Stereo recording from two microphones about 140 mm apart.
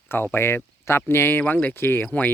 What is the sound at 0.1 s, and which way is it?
Speech, 15° left (ahead or behind).